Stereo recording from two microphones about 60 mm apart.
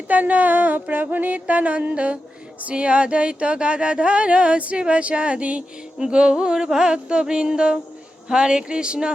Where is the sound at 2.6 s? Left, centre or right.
Centre.